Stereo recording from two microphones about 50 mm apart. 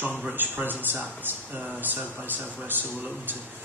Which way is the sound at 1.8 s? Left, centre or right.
Right.